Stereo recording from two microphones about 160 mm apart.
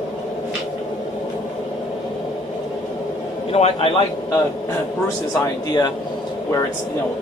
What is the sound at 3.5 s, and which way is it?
Speech, 40° left (ahead or behind).